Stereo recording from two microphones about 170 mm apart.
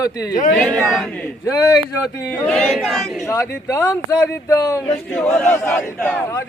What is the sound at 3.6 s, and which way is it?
Speech, 20° left (ahead or behind).